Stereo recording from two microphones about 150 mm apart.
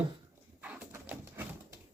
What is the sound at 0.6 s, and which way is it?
Bird, 10° right (ahead or behind).